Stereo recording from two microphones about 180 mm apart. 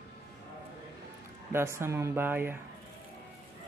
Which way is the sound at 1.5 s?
15° right (ahead or behind).